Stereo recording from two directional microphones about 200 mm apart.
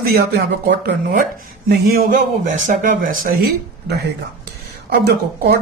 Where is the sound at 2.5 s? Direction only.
40° right (ahead or behind).